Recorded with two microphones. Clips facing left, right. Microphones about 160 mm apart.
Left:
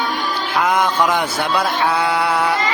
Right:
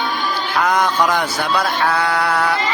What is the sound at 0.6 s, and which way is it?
Male singing, 10° left (ahead or behind).